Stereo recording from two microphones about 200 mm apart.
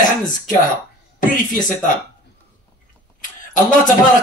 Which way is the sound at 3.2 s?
40° left (ahead or behind).